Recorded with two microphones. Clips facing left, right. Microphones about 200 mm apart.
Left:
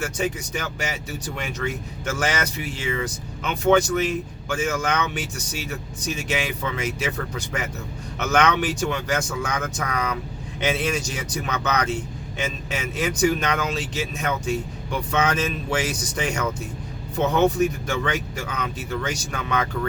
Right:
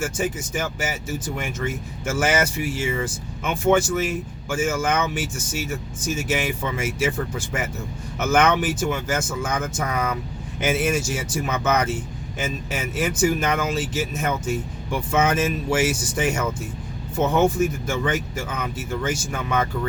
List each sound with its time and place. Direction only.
0.5 s speech: 5° right (ahead or behind)
2.0 s speech: 5° right (ahead or behind)
8.2 s speech: 5° right (ahead or behind)
13.0 s speech: 5° right (ahead or behind)